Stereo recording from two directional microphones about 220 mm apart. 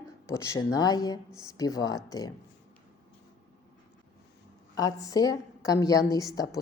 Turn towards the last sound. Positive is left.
turn(degrees=15)  # may be behind; listen again after turning